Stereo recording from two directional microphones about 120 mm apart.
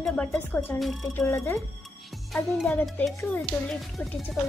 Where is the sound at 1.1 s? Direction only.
20° left (ahead or behind).